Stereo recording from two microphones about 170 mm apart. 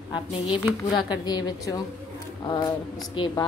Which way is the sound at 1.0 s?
25° left (ahead or behind).